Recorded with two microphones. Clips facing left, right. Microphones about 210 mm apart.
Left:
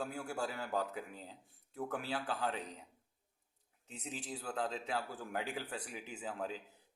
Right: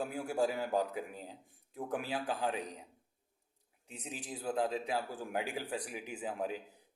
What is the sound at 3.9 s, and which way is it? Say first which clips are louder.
A man's voice: even; 15° right (ahead or behind).